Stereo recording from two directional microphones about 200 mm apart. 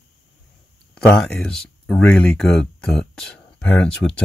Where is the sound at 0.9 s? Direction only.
5° left (ahead or behind).